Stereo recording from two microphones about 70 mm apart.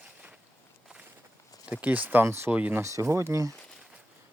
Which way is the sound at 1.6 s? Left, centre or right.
Right.